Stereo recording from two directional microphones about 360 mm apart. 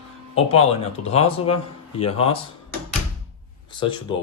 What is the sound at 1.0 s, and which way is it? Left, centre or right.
Speech, centre.